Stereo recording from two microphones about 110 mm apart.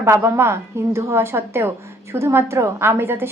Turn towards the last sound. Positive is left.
turn(degrees=-20)  # may be behind; listen again after turning